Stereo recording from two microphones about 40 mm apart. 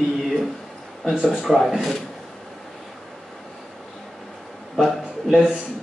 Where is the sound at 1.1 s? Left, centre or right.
Right.